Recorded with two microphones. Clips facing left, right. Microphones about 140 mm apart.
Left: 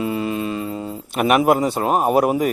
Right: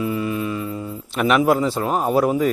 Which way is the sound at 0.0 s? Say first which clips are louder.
Left 1 dB; 25° left (ahead or behind).